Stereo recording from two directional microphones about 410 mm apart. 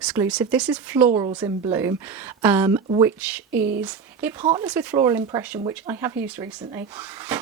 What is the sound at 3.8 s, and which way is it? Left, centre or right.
Speech, centre.